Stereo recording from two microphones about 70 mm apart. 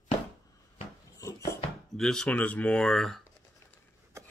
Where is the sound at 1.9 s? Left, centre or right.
Centre.